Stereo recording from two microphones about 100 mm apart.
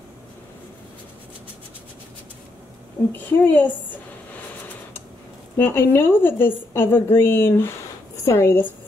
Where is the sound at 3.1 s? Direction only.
20° left (ahead or behind).